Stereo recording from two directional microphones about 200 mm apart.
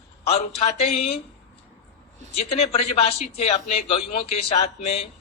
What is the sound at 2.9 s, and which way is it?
Speech, 30° left (ahead or behind).